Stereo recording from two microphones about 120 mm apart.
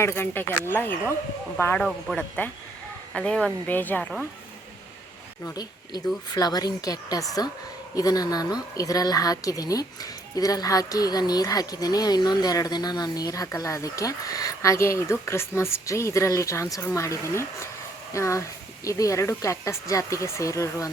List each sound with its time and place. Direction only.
0.0 s speech: 20° left (ahead or behind)
1.8 s speech: centre (ahead or behind)
6.3 s a woman's voice: 35° left (ahead or behind)